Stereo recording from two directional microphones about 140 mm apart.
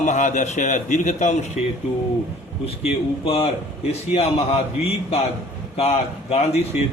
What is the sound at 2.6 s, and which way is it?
A man's voice, 45° left (ahead or behind).